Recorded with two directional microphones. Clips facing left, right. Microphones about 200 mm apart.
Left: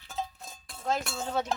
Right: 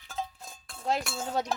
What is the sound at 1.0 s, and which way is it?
Cowbell, centre (ahead or behind).